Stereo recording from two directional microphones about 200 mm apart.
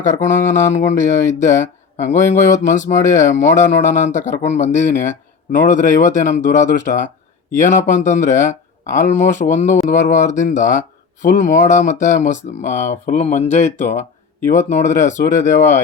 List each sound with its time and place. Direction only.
0.0 s speech: 40° left (ahead or behind)
1.2 s speech: 15° left (ahead or behind)
2.0 s speech: 40° left (ahead or behind)